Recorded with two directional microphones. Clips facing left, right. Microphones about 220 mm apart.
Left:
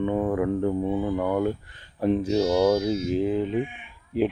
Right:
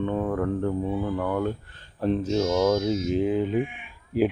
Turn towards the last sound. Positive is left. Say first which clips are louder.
# right 1 dB
turn(degrees=-5)  # may be behind; listen again after turning